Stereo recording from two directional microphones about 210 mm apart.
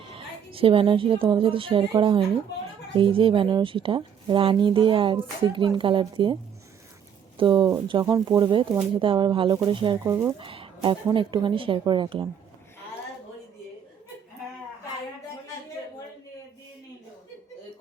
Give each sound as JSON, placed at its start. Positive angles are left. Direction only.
{"t": 0.1, "sound": "a woman's voice", "side_deg": -25}
{"t": 7.3, "sound": "a woman's voice", "side_deg": -20}
{"t": 10.3, "sound": "a woman's voice", "side_deg": -25}